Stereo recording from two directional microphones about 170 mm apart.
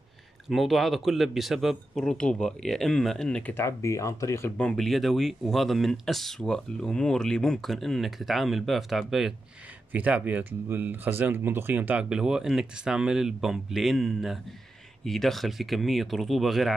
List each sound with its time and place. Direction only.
0.5 s speech: centre (ahead or behind)